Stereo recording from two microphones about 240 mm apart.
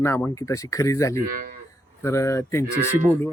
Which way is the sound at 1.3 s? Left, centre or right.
Right.